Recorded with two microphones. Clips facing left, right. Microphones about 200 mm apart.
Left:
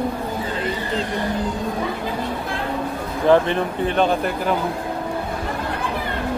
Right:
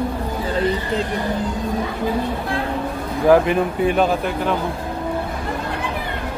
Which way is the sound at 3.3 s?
10° right (ahead or behind).